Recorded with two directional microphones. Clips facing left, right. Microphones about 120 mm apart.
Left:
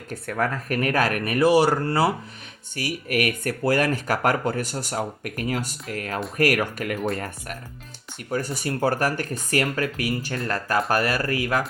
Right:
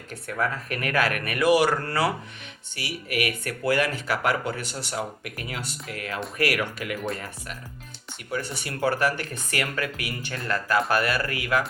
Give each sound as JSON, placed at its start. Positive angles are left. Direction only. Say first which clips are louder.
{"t": 0.1, "sound": "speech", "louder": "left 2 dB", "side_deg": 45}
{"t": 2.7, "sound": "speech", "louder": "left 4 dB", "side_deg": 45}